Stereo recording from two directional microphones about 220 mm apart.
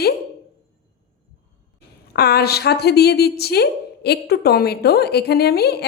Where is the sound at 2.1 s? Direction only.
45° left (ahead or behind).